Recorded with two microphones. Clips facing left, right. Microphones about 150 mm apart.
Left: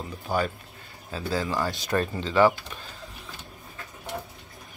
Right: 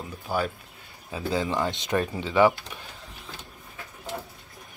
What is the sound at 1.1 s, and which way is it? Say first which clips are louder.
Speech: right 1 dB; 20° right (ahead or behind).